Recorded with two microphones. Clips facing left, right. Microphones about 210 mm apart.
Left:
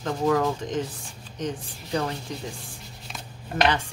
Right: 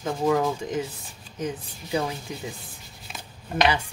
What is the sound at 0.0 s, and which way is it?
Speech, 10° right (ahead or behind).